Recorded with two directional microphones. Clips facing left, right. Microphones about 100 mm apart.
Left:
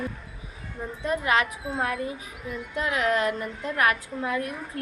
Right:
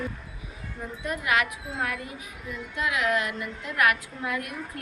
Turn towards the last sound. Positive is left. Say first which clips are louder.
# left 3 dB
turn(degrees=30)  # may be behind; listen again after turning